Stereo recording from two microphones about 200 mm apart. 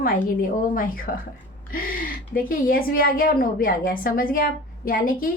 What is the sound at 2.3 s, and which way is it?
A woman's voice, 45° left (ahead or behind).